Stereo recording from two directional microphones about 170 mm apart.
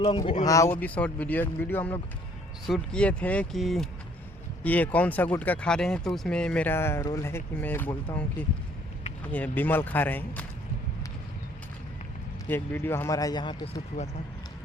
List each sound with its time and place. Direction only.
0.0 s speech: 30° left (ahead or behind)
0.4 s speech: 20° left (ahead or behind)
12.5 s speech: 10° left (ahead or behind)